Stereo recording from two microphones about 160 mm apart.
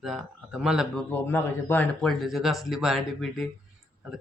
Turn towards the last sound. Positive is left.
turn(degrees=0)  # may be behind; listen again after turning